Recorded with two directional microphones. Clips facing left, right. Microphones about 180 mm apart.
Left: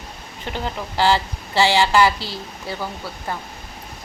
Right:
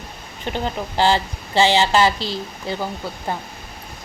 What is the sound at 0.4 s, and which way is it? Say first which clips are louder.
Speech: right 3 dB; 20° right (ahead or behind).